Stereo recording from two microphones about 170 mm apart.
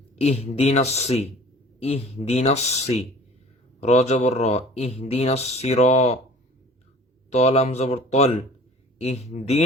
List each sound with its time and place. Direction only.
0.2 s speech: 40° left (ahead or behind)
7.3 s speech: 40° left (ahead or behind)